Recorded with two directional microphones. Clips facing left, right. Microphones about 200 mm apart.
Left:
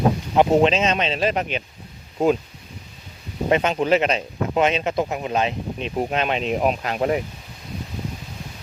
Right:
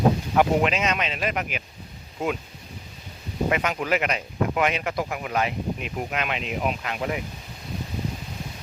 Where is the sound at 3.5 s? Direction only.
30° left (ahead or behind).